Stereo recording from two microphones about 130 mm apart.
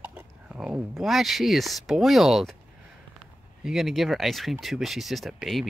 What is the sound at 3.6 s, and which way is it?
Speech, centre (ahead or behind).